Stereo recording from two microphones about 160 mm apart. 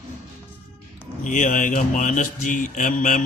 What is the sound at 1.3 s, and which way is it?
A man's voice, 55° left (ahead or behind).